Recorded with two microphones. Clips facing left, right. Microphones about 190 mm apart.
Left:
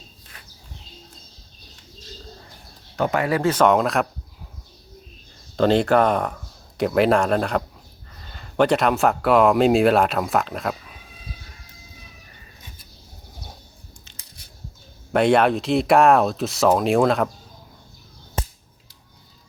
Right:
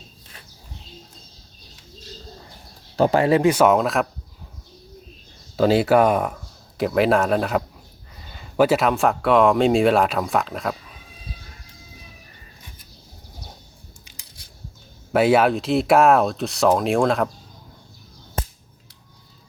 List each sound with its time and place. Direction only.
2.9 s speech: 30° right (ahead or behind)
3.4 s speech: 10° right (ahead or behind)
5.5 s speech: 5° right (ahead or behind)
15.1 s speech: 5° right (ahead or behind)